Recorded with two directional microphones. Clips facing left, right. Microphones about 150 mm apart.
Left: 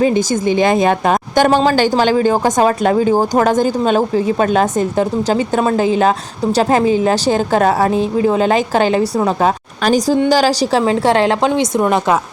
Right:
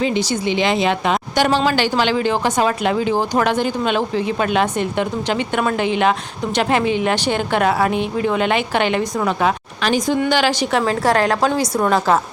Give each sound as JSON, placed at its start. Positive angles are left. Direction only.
{"t": 0.0, "sound": "a woman's voice", "side_deg": 45}